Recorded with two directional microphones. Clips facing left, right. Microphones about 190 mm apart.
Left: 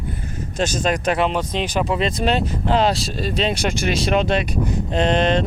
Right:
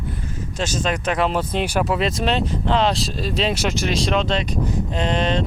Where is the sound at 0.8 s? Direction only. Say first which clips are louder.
Left 2 dB; 40° left (ahead or behind).